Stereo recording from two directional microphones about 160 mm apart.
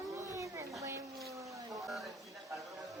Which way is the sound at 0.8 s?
15° right (ahead or behind).